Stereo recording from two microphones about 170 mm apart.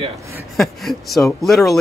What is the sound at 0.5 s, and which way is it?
Speech, centre (ahead or behind).